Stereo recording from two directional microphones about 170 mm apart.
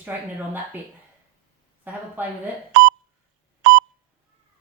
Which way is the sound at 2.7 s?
65° right (ahead or behind).